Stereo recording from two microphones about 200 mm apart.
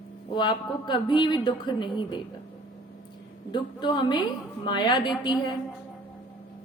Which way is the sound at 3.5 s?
25° left (ahead or behind).